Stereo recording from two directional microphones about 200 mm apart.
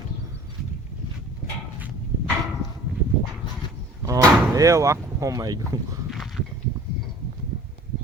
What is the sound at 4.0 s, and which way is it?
Door, 15° right (ahead or behind).